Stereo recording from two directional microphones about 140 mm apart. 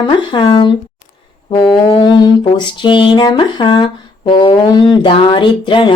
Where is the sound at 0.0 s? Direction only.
35° left (ahead or behind).